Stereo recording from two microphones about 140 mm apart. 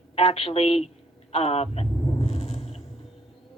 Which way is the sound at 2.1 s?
45° left (ahead or behind).